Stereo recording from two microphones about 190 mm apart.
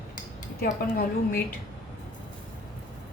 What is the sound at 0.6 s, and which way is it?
Speech, 50° left (ahead or behind).